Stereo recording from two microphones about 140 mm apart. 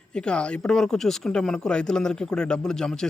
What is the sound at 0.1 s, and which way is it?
A man's voice, 5° left (ahead or behind).